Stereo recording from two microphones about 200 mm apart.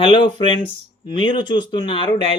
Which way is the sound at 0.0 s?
25° left (ahead or behind).